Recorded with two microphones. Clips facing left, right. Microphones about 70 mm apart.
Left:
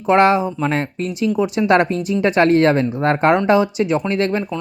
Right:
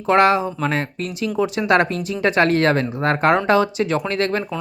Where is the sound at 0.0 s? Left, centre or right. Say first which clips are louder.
Left 2 dB; left.